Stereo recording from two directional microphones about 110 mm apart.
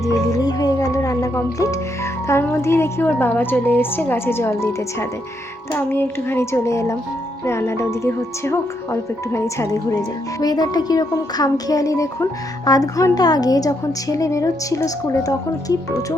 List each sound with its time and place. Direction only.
0.0 s a woman's voice: 30° left (ahead or behind)
10.4 s speech: 35° left (ahead or behind)